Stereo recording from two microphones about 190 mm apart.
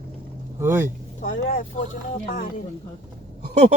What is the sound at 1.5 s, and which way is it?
Speech, 40° left (ahead or behind).